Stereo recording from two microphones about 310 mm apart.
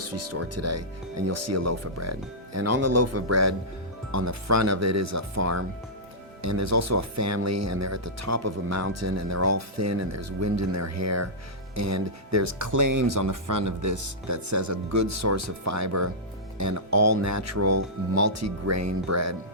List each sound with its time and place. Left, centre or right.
0.0 s speech: right